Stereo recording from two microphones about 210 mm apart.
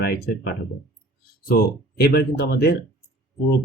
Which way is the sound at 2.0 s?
50° left (ahead or behind).